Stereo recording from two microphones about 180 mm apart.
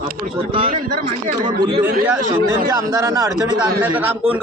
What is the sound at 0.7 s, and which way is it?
Speech, 45° right (ahead or behind).